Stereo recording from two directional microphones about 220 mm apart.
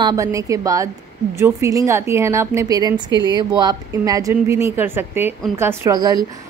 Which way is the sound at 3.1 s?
20° left (ahead or behind).